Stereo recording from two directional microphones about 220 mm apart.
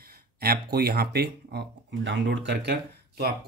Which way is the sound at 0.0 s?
45° right (ahead or behind).